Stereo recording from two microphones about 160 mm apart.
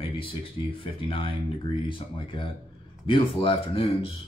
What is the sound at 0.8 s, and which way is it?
Speech, 35° left (ahead or behind).